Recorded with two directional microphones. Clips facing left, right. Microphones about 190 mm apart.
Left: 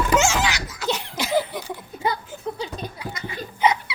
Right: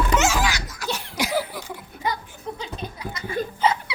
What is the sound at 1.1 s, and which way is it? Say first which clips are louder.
Speech: left 1 dB; 15° right (ahead or behind).